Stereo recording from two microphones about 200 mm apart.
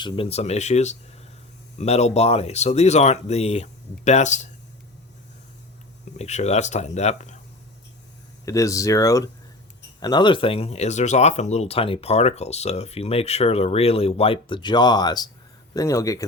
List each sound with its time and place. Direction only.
0.0 s speech: 30° left (ahead or behind)
6.1 s speech: 35° left (ahead or behind)
8.4 s speech: 15° left (ahead or behind)